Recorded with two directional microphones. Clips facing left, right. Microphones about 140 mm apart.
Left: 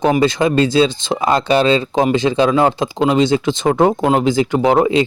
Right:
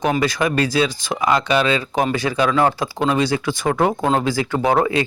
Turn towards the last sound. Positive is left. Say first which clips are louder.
# left 4 dB
turn(degrees=20)  # may be behind; listen again after turning